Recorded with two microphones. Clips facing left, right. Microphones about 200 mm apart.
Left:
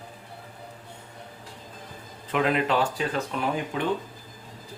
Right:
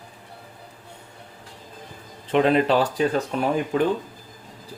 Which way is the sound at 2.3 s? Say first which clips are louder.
Right 6 dB; 30° right (ahead or behind).